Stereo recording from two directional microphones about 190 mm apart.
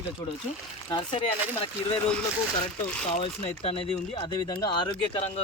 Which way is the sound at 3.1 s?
30° left (ahead or behind).